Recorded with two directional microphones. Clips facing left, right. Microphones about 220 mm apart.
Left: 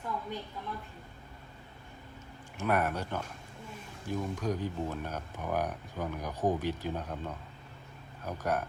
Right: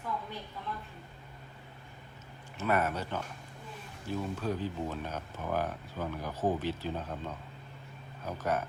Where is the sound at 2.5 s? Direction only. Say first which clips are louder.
Even; 10° left (ahead or behind).